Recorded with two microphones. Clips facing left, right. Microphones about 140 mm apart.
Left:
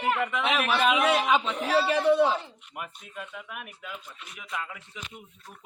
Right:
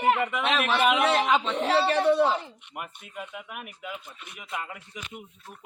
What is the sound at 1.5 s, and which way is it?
Speech, 30° right (ahead or behind).